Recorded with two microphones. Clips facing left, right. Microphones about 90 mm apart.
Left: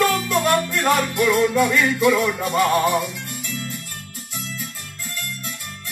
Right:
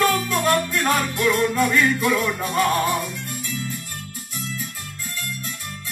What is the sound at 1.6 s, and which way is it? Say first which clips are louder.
Music: left 1 dB; 15° left (ahead or behind).